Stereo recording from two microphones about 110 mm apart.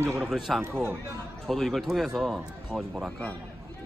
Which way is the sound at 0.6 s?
20° right (ahead or behind).